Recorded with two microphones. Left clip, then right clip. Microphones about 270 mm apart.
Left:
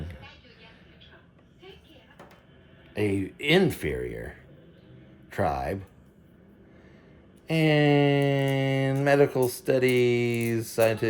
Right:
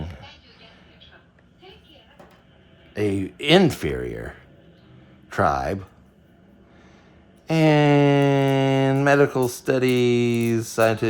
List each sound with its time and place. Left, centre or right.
2.9 s speech: centre
7.4 s a sound: centre
9.0 s speech: centre